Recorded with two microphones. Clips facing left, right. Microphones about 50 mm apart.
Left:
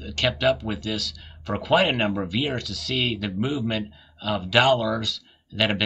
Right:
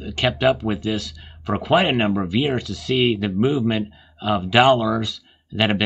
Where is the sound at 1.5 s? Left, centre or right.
Centre.